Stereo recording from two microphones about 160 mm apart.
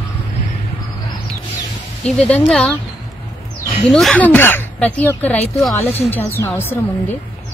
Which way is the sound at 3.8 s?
Centre (ahead or behind).